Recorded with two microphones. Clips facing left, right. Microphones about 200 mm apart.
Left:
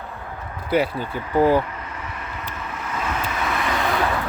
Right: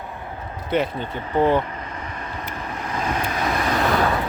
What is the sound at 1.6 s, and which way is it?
Vehicle, 35° right (ahead or behind).